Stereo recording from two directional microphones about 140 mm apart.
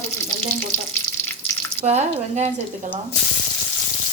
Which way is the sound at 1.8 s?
50° right (ahead or behind).